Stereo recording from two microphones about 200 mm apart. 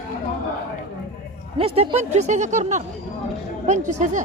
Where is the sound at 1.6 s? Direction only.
30° right (ahead or behind).